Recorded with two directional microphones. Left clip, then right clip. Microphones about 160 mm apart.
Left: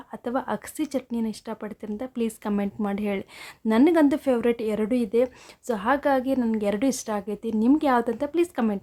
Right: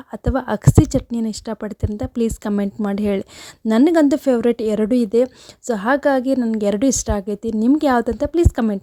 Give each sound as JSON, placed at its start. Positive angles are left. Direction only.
{"t": 0.1, "sound": "a woman's voice", "side_deg": -40}